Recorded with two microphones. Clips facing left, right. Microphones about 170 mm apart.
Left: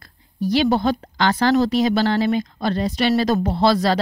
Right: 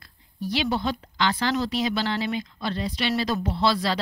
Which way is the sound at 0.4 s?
45° left (ahead or behind).